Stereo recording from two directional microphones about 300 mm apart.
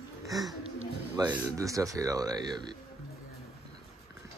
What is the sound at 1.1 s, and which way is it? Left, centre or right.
Mantra, centre.